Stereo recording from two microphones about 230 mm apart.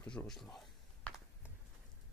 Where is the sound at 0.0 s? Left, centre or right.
Centre.